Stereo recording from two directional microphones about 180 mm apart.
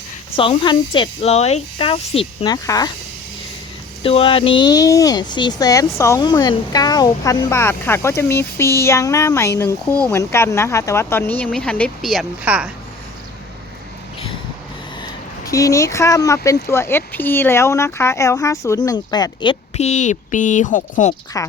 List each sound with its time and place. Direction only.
0.3 s speech: 25° left (ahead or behind)
4.0 s speech: 30° left (ahead or behind); by 12.7 s 5° right (ahead or behind)
15.4 s speech: 20° left (ahead or behind); by 21.1 s 45° left (ahead or behind)
21.3 s speech: 20° left (ahead or behind)